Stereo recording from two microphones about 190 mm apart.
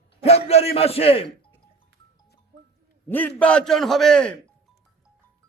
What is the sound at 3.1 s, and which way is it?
A man's voice, 10° left (ahead or behind).